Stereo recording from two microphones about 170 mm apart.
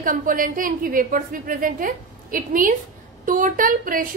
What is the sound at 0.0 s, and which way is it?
A woman's voice, 50° right (ahead or behind).